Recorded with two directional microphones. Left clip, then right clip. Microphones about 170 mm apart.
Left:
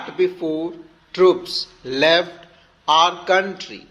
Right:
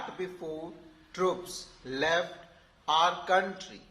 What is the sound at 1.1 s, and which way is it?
Speech, 30° left (ahead or behind).